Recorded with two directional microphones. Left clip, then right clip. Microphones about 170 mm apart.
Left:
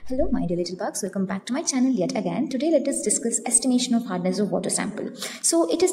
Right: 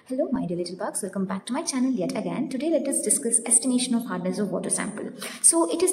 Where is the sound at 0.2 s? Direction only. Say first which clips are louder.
Left 2 dB; 15° left (ahead or behind).